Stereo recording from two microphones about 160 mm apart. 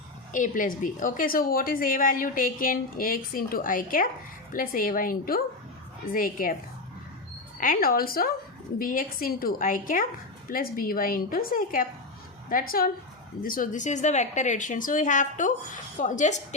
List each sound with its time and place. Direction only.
0.3 s a woman's voice: 55° left (ahead or behind)
7.6 s a woman's voice: 65° left (ahead or behind)